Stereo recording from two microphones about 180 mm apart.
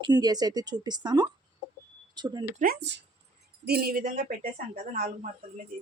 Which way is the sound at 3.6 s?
60° right (ahead or behind).